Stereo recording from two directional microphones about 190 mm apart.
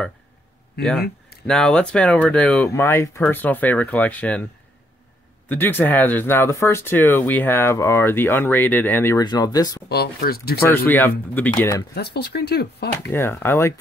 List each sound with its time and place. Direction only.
1.5 s speech: 5° left (ahead or behind)
5.5 s speech: 10° left (ahead or behind)
9.8 s speech: 55° left (ahead or behind)
10.7 s speech: 10° left (ahead or behind)
11.9 s speech: 55° left (ahead or behind)
13.1 s speech: 10° left (ahead or behind)